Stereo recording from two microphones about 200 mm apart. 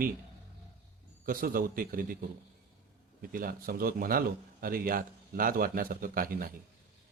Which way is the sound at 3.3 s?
45° right (ahead or behind).